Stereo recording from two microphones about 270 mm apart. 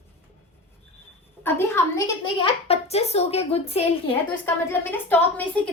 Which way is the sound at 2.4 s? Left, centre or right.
Left.